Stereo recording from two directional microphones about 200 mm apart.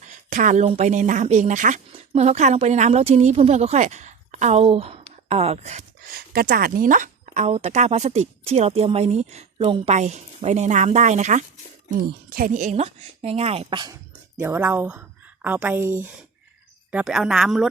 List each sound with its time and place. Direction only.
0.0 s a woman's voice: 40° right (ahead or behind)
11.9 s a woman's voice: 45° right (ahead or behind); by 17.7 s centre (ahead or behind)